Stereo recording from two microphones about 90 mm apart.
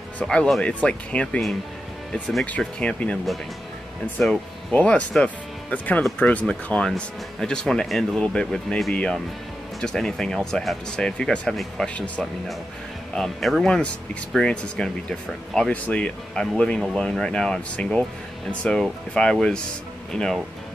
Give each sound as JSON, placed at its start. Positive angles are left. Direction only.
{"t": 0.2, "sound": "speech", "side_deg": 10}
{"t": 2.4, "sound": "speech", "side_deg": 15}
{"t": 4.2, "sound": "speech", "side_deg": 5}